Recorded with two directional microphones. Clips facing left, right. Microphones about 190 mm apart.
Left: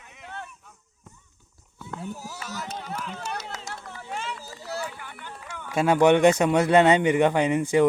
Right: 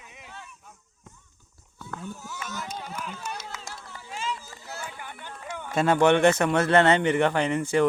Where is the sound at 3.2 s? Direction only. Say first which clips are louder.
Left 3 dB; 65° left (ahead or behind).